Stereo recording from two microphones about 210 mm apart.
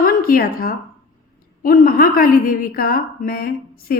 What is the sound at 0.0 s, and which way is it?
A woman's voice, 45° left (ahead or behind).